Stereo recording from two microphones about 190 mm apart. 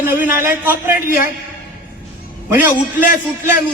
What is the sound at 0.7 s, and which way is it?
Speech, 45° left (ahead or behind).